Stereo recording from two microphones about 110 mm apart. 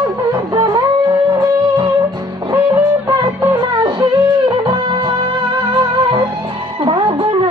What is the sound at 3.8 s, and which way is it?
Music, 40° right (ahead or behind).